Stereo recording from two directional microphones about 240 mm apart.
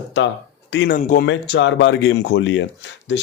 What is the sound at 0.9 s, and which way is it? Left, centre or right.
Speech, left.